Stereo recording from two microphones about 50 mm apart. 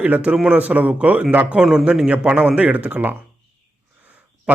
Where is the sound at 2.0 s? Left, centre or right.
Right.